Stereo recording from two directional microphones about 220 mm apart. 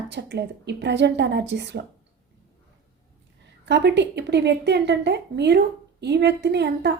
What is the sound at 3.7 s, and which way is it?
A woman's voice, 50° right (ahead or behind).